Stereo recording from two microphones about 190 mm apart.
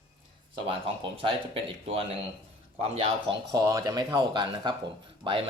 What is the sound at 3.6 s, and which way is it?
Speech, 15° right (ahead or behind).